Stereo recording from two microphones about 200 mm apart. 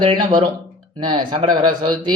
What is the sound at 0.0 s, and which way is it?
A man's voice, 25° right (ahead or behind).